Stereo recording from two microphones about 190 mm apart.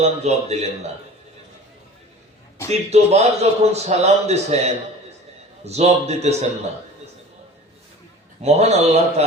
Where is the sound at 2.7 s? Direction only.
35° right (ahead or behind).